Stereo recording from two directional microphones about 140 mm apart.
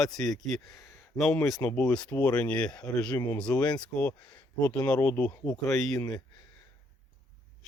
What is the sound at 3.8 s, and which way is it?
Speech, 10° left (ahead or behind).